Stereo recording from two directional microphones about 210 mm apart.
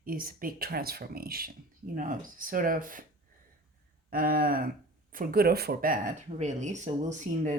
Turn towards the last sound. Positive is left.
turn(degrees=-35)  # may be behind; listen again after turning